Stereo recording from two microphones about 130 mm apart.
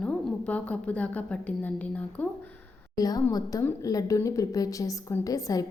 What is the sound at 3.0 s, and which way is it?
A woman's voice, 30° left (ahead or behind).